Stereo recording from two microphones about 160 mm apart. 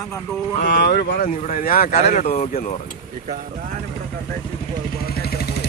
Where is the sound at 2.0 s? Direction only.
45° left (ahead or behind).